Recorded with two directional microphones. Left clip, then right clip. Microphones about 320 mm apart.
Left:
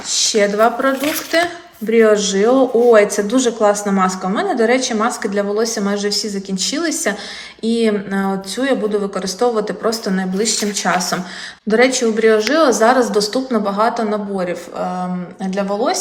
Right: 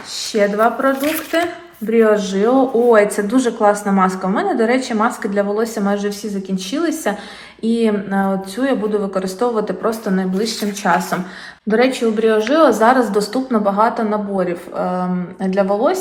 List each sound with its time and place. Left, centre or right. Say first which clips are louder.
0.3 s speech: even; centre